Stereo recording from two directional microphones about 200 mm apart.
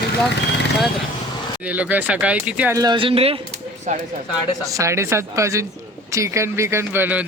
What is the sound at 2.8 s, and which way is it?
Speech, 25° right (ahead or behind).